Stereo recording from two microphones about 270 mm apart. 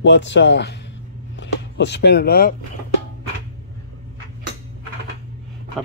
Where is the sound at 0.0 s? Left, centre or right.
Left.